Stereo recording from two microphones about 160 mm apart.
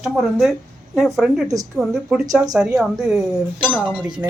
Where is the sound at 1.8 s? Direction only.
Centre (ahead or behind).